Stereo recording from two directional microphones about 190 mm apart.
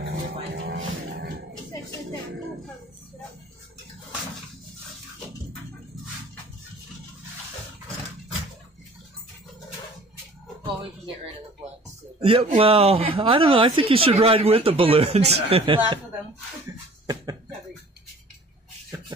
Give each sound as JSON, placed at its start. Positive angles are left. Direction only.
{"t": 0.6, "sound": "music", "side_deg": -70}
{"t": 12.2, "sound": "speech", "side_deg": -30}
{"t": 17.0, "sound": "cough", "side_deg": -20}